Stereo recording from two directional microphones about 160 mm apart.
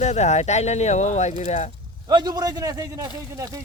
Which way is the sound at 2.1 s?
25° right (ahead or behind).